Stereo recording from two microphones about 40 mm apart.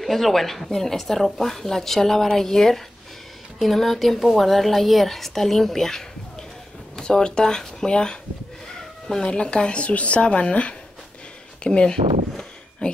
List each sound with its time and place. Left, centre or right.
0.0 s speech: centre; by 8.2 s left
9.2 s speech: left
11.6 s a sound: left